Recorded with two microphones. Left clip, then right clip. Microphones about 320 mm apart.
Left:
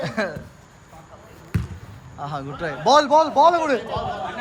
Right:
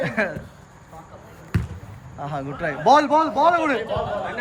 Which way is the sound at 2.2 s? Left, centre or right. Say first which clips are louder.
Right 1 dB; centre.